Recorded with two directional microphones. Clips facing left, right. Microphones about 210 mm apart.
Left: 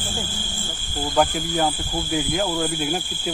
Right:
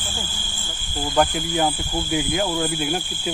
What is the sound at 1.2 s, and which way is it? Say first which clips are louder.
Speech: even; centre (ahead or behind).